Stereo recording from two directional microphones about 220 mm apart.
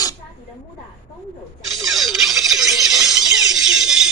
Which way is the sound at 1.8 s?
Centre (ahead or behind).